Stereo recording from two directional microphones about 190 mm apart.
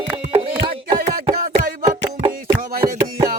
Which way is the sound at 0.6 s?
25° right (ahead or behind).